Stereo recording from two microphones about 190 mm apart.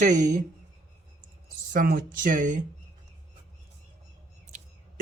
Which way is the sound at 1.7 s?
50° right (ahead or behind).